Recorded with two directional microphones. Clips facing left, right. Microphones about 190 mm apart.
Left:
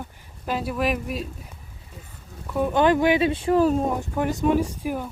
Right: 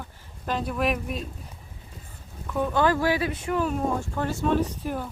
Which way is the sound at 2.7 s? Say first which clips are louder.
Left 5 dB; 20° left (ahead or behind).